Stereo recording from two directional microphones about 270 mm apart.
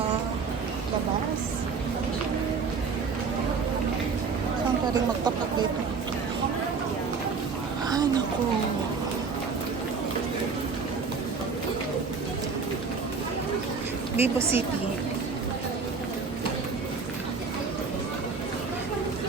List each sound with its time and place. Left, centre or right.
14.2 s a woman's voice: centre